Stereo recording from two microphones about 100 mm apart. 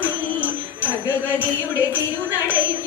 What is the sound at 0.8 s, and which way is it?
Music, 20° left (ahead or behind).